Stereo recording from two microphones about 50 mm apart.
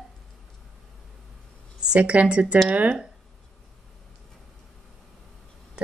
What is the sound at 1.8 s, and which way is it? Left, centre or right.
Speech, right.